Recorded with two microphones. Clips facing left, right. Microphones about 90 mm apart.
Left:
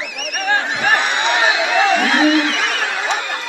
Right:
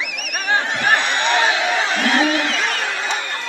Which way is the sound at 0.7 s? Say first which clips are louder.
Left 1 dB; 5° left (ahead or behind).